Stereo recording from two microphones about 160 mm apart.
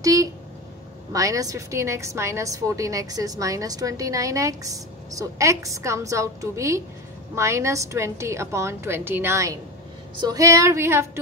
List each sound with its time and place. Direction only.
0.0 s a woman's voice: 20° right (ahead or behind)